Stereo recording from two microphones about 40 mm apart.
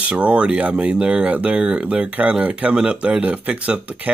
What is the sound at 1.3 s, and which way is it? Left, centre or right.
Speech, right.